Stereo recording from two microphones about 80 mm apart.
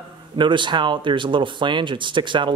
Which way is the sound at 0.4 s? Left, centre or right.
Right.